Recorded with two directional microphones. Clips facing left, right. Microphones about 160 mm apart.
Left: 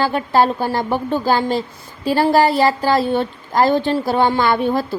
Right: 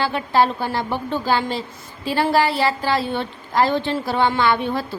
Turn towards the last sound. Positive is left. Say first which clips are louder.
# left 3 dB
turn(degrees=40)  # may be behind; listen again after turning